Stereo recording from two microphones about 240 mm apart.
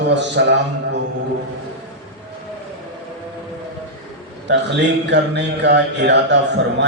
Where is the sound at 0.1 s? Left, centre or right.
Right.